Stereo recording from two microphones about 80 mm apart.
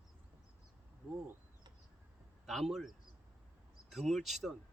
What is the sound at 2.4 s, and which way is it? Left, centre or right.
Speech, centre.